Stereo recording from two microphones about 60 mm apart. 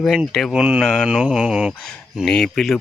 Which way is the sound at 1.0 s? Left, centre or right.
Centre.